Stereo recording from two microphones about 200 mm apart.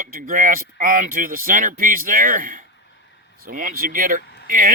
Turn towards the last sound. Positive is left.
turn(degrees=-45)  # may be behind; listen again after turning